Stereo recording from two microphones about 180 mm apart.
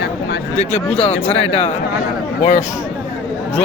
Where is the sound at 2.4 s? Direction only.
45° left (ahead or behind).